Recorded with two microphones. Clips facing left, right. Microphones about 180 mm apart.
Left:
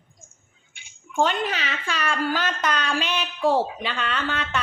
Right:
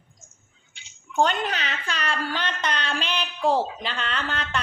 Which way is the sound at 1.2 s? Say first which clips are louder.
Left 1 dB; centre (ahead or behind).